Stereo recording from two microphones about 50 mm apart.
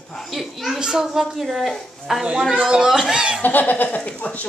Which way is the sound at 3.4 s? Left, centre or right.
Left.